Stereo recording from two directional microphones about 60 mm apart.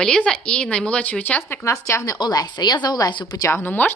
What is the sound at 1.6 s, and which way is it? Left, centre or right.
A woman's voice, left.